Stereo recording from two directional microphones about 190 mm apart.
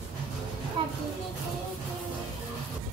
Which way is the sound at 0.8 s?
25° right (ahead or behind).